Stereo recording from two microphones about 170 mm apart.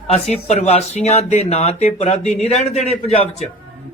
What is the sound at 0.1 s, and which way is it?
Speech, 40° left (ahead or behind).